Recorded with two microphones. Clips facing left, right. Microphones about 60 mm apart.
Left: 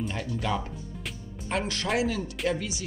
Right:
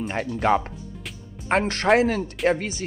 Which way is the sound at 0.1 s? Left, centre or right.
Right.